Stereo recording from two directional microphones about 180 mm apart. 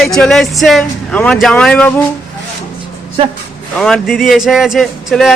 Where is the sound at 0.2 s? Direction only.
Centre (ahead or behind).